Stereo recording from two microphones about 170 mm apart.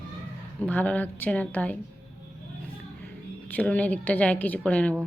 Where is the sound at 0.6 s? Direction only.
10° left (ahead or behind).